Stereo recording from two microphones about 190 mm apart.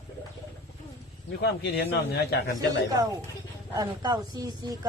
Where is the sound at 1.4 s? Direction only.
60° left (ahead or behind).